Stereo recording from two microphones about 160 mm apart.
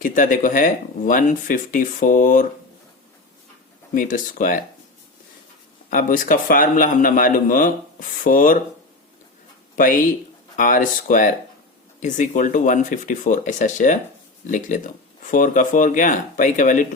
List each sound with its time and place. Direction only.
0.0 s a man's voice: 55° left (ahead or behind)
3.9 s a man's voice: 55° left (ahead or behind)
5.9 s a man's voice: 60° left (ahead or behind)
9.7 s a man's voice: 60° left (ahead or behind)